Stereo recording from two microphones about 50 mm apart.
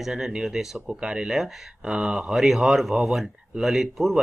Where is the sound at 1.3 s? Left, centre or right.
Centre.